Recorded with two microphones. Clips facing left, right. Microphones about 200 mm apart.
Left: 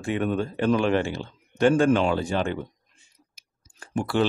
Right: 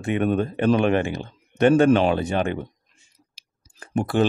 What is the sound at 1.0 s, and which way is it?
Speech, 15° right (ahead or behind).